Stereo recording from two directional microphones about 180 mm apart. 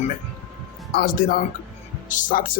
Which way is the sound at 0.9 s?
55° left (ahead or behind).